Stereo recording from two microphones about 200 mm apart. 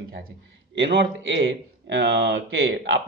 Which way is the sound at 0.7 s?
60° right (ahead or behind).